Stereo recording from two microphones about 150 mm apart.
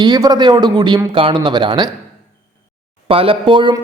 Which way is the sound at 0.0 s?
25° right (ahead or behind).